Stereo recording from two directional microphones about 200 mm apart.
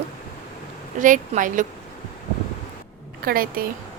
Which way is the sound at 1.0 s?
40° right (ahead or behind).